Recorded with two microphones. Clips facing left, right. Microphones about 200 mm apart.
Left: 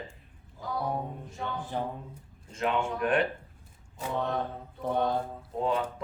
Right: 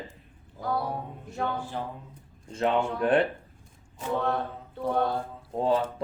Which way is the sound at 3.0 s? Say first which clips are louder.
Right 4 dB; 30° right (ahead or behind).